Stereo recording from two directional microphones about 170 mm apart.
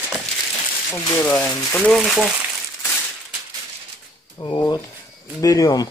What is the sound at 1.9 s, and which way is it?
Speech, centre (ahead or behind).